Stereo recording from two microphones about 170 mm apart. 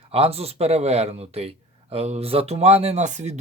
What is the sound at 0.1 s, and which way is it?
Speech, 35° right (ahead or behind).